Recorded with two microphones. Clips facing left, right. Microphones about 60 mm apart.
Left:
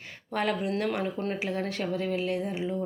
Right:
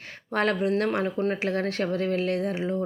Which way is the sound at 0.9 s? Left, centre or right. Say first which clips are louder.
Right 3 dB; right.